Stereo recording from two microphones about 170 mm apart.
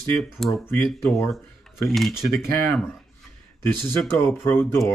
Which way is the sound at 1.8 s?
Centre (ahead or behind).